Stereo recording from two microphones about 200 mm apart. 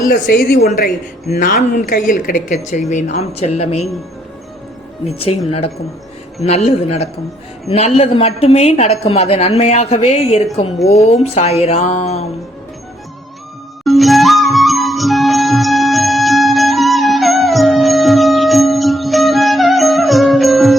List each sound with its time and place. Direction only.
0.0 s a woman's voice: 50° left (ahead or behind)
1.3 s a woman's voice: 45° left (ahead or behind)
5.5 s a woman's voice: 30° left (ahead or behind)
13.8 s music: centre (ahead or behind)